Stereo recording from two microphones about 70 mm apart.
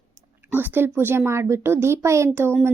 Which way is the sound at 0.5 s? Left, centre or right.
Right.